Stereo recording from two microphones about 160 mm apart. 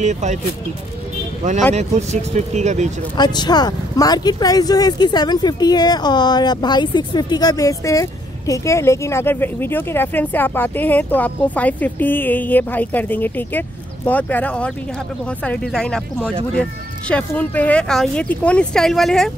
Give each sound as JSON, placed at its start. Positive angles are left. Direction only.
{"t": 0.0, "sound": "speech", "side_deg": -50}
{"t": 1.4, "sound": "speech", "side_deg": -45}
{"t": 3.2, "sound": "speech", "side_deg": 25}